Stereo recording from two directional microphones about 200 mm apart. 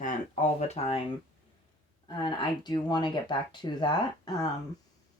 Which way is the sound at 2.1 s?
20° left (ahead or behind).